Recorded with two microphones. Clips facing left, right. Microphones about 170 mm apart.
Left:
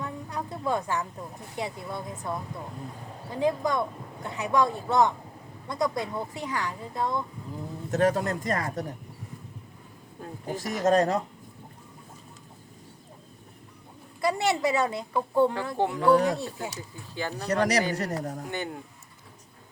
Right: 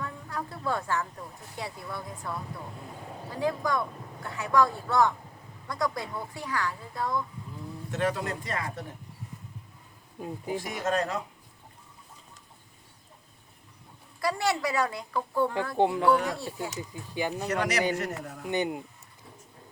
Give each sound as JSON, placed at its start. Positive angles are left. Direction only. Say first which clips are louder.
{"t": 0.0, "sound": "a sound", "louder": "left 2 dB", "side_deg": 20}
{"t": 1.5, "sound": "speech", "louder": "left 4 dB", "side_deg": 20}
{"t": 7.9, "sound": "speech", "louder": "left 5 dB", "side_deg": 45}
{"t": 10.2, "sound": "speech", "louder": "right 2 dB", "side_deg": -10}
{"t": 10.8, "sound": "a man's voice", "louder": "left 8 dB", "side_deg": 40}
{"t": 14.2, "sound": "speech", "louder": "left 3 dB", "side_deg": 20}
{"t": 15.8, "sound": "speech", "louder": "right 3 dB", "side_deg": -20}
{"t": 16.0, "sound": "speech", "louder": "left 3 dB", "side_deg": 25}
{"t": 16.6, "sound": "speech", "louder": "right 1 dB", "side_deg": -15}
{"t": 17.5, "sound": "a man's voice", "louder": "left 5 dB", "side_deg": 35}
{"t": 18.4, "sound": "speech", "louder": "right 5 dB", "side_deg": -20}